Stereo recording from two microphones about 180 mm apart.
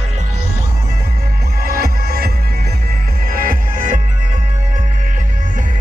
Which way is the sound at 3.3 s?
50° right (ahead or behind).